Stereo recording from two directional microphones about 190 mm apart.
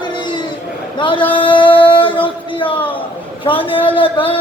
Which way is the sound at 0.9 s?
25° left (ahead or behind).